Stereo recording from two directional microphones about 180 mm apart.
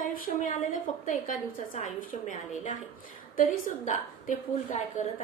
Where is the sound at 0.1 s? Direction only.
50° left (ahead or behind).